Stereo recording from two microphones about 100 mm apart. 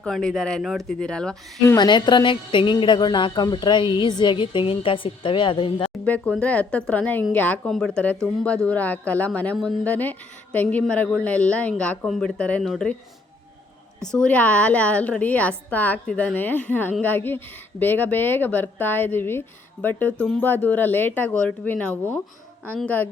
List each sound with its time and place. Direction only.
0.0 s a woman's voice: 5° left (ahead or behind)
1.7 s a woman's voice: 50° left (ahead or behind)
6.1 s a woman's voice: 10° left (ahead or behind)
9.6 s speech: 5° left (ahead or behind)
9.8 s a woman's voice: 15° left (ahead or behind)
12.0 s a woman's voice: centre (ahead or behind)
14.0 s a woman's voice: 5° left (ahead or behind)